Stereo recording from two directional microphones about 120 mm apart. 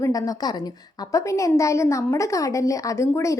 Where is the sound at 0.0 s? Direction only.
30° left (ahead or behind).